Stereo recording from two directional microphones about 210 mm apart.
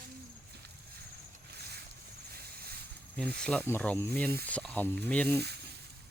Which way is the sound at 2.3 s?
50° right (ahead or behind).